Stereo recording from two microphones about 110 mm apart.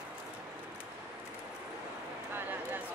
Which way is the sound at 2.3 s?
20° right (ahead or behind).